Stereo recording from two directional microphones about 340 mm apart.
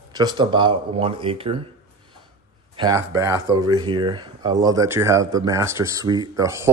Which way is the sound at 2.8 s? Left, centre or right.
Centre.